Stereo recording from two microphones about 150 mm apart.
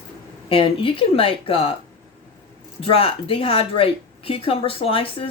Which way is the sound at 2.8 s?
40° left (ahead or behind).